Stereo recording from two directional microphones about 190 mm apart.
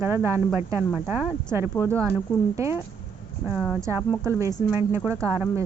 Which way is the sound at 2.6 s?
15° right (ahead or behind).